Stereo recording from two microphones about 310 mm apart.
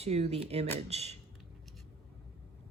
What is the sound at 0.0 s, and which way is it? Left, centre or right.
Speech, centre.